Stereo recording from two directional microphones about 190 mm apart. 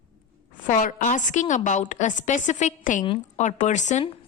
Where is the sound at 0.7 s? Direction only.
45° left (ahead or behind).